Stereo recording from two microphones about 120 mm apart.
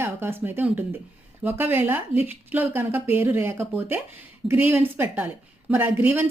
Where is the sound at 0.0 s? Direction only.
20° right (ahead or behind).